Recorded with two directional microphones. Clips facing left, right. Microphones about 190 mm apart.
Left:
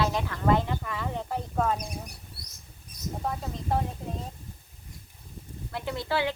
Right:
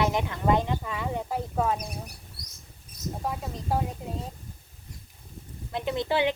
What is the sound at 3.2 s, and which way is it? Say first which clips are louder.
Speech: left 1 dB; 5° right (ahead or behind).